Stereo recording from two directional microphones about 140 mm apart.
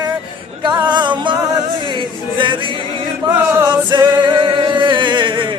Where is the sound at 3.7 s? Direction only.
35° right (ahead or behind).